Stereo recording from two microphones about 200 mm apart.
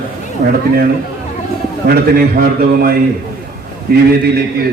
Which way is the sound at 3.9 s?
50° right (ahead or behind).